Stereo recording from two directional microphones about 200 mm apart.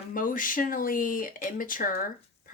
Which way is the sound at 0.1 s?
45° left (ahead or behind).